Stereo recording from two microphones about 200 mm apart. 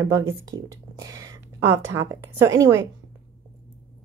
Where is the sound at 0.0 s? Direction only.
15° right (ahead or behind).